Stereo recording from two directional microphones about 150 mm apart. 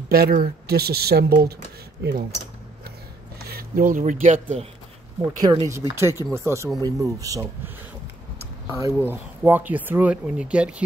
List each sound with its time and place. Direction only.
0.1 s speech: 90° right
3.4 s speech: 80° right; by 4.6 s 55° right (ahead or behind)
5.2 s speech: 25° right (ahead or behind); by 10.8 s 5° right (ahead or behind)